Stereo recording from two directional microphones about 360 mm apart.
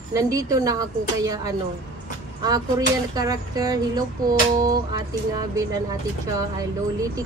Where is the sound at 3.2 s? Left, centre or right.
Centre.